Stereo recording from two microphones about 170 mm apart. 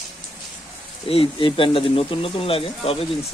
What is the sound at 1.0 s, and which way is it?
Speech, 35° left (ahead or behind).